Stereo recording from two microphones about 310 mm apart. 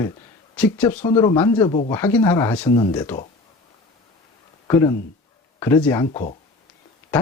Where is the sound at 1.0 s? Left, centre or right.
Centre.